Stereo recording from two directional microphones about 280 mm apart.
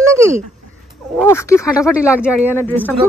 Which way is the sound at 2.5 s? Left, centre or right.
Centre.